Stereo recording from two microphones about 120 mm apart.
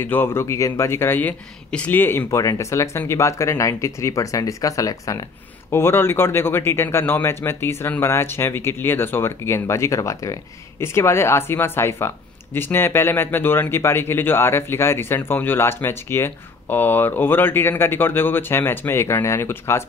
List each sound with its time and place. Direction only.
0.0 s speech: 20° left (ahead or behind)